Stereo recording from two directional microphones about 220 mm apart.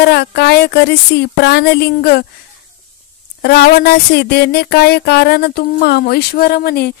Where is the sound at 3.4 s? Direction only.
45° left (ahead or behind).